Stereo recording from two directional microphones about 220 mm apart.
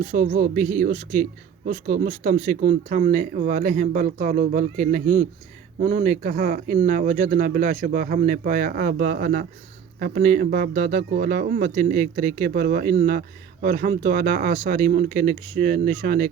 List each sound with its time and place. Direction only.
0.1 s speech: 40° right (ahead or behind)